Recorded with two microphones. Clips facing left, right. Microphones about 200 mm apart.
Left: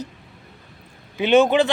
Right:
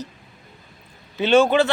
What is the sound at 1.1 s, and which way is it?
Speech, 15° left (ahead or behind).